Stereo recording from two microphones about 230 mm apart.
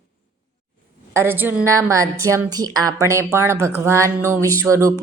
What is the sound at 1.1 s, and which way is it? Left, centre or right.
A woman's voice, centre.